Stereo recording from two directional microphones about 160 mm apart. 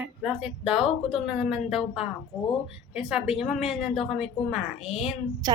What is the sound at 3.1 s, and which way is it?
Speech, 5° right (ahead or behind).